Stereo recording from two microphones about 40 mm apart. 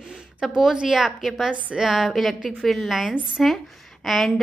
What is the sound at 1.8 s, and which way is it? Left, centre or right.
A woman's voice, centre.